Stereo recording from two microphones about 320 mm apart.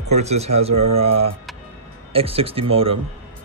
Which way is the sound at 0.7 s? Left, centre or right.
Right.